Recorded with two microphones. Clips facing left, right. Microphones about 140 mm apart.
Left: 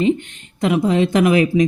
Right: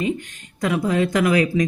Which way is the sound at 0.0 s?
25° left (ahead or behind).